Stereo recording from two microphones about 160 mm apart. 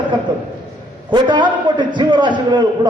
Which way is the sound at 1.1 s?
30° right (ahead or behind).